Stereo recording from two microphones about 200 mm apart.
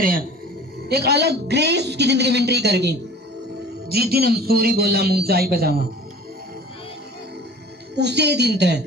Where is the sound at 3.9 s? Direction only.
50° right (ahead or behind).